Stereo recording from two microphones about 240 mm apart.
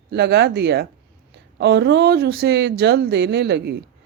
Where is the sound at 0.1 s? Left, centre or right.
Right.